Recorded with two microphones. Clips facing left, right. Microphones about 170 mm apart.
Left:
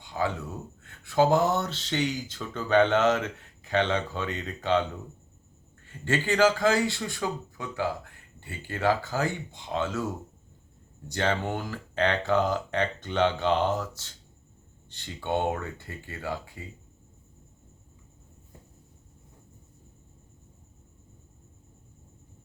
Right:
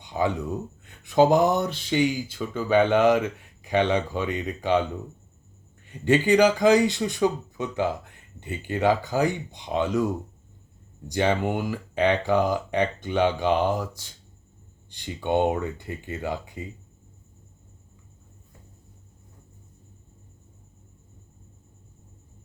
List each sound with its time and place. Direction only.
0.0 s a sound: 20° right (ahead or behind)
0.9 s speech: 15° right (ahead or behind)
5.8 s speech: 15° right (ahead or behind)
11.1 s speech: 15° right (ahead or behind)